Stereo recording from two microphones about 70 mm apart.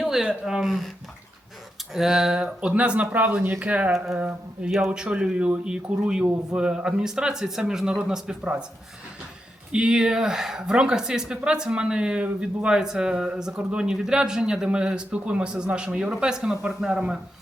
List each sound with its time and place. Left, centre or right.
0.0 s speech: centre
1.9 s speech: centre
9.7 s speech: centre